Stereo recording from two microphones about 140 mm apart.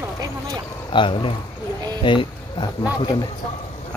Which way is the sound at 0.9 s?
35° left (ahead or behind).